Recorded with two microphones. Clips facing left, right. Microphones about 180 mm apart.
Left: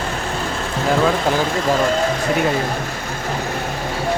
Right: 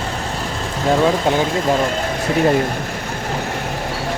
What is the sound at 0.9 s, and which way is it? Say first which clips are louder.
Speech: right 2 dB; 20° right (ahead or behind).